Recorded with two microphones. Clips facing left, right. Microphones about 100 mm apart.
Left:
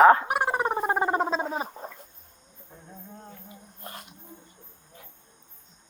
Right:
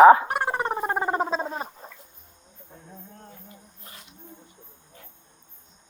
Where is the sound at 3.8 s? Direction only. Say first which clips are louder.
Left 9 dB; 50° left (ahead or behind).